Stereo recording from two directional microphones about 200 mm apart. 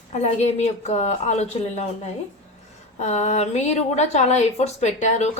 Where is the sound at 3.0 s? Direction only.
35° left (ahead or behind).